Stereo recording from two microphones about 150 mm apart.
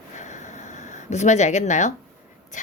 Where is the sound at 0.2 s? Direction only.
55° left (ahead or behind).